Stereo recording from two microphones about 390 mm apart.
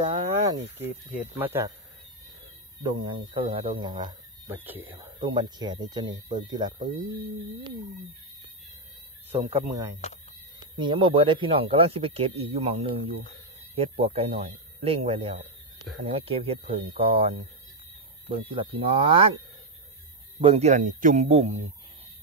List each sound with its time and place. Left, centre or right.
0.0 s cricket: centre
0.8 s speech: centre
2.8 s speech: centre
9.3 s speech: centre
20.3 s speech: centre